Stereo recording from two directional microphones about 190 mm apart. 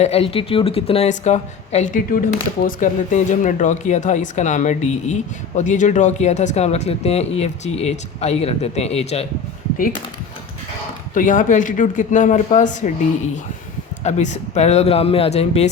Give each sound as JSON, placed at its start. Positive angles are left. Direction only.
{"t": 0.0, "sound": "speech", "side_deg": 30}
{"t": 11.1, "sound": "speech", "side_deg": 45}
{"t": 14.0, "sound": "speech", "side_deg": 35}